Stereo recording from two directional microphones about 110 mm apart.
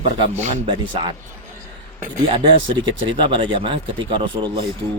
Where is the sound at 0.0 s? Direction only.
90° right.